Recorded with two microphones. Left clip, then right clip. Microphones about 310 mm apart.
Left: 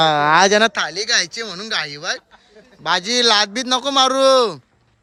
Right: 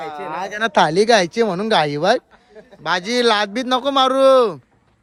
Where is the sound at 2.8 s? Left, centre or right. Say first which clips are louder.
Left 1 dB; centre.